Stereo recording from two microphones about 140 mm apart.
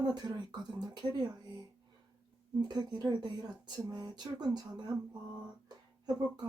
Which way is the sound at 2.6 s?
30° right (ahead or behind).